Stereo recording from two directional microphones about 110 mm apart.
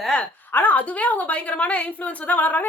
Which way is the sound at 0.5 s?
15° left (ahead or behind).